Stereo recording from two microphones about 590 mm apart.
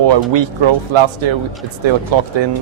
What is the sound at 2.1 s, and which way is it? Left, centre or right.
Speech, right.